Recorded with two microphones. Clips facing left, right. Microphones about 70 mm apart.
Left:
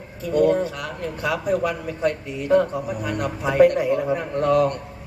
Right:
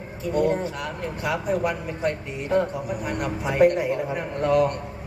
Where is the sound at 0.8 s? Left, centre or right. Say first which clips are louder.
Left 2 dB; right.